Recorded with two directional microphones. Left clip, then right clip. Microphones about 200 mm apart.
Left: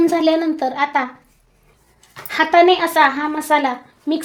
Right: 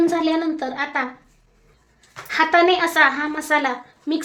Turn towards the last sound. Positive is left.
turn(degrees=25)  # may be behind; listen again after turning